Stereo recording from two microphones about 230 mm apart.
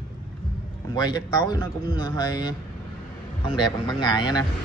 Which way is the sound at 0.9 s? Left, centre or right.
Centre.